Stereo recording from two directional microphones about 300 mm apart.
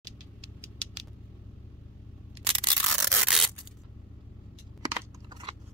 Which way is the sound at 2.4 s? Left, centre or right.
Centre.